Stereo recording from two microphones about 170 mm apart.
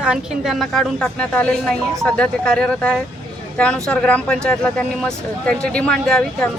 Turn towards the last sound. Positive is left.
turn(degrees=5)  # may be behind; listen again after turning